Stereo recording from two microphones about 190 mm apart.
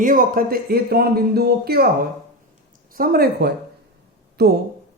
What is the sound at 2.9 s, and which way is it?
Speech, 50° right (ahead or behind).